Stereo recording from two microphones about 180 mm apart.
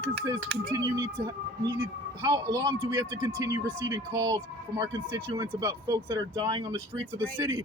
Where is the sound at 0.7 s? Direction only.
20° right (ahead or behind).